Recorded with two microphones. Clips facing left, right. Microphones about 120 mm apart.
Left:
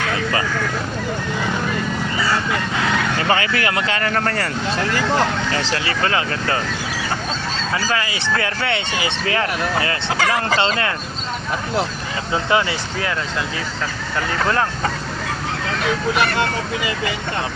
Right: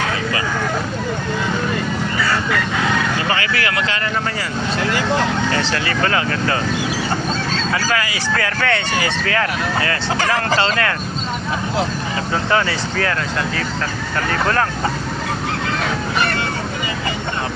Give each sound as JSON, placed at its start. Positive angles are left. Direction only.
{"t": 3.2, "sound": "speech", "side_deg": 30}
{"t": 4.1, "sound": "speech", "side_deg": 60}
{"t": 5.7, "sound": "speech", "side_deg": 25}
{"t": 7.9, "sound": "speech", "side_deg": 25}
{"t": 12.3, "sound": "speech", "side_deg": 15}